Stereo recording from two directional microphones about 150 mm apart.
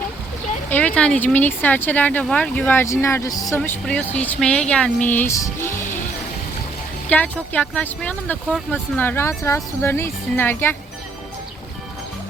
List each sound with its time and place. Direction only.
0.7 s speech: 10° left (ahead or behind)
3.6 s speech: 5° left (ahead or behind)
7.1 s speech: 10° left (ahead or behind)